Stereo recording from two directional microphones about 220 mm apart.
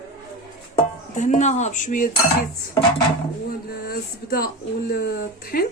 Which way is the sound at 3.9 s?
40° left (ahead or behind).